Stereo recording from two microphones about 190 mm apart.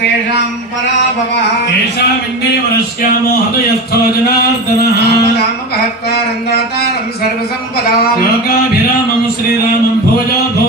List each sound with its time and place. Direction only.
4.8 s music: 55° left (ahead or behind)